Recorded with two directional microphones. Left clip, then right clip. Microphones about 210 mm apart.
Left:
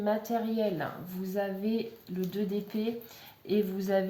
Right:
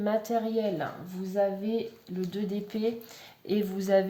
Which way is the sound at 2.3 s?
20° right (ahead or behind).